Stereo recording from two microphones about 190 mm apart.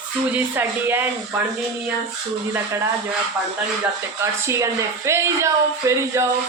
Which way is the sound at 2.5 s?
15° right (ahead or behind).